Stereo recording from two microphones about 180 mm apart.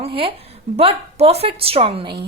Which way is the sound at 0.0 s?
30° right (ahead or behind).